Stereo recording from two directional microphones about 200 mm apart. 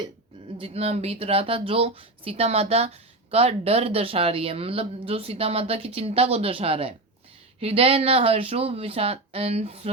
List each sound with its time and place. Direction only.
0.6 s speech: 30° right (ahead or behind)